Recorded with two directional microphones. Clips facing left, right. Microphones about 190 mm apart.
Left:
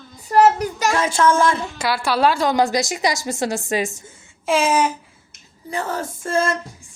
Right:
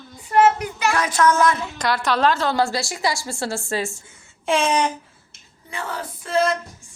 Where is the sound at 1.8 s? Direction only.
10° left (ahead or behind).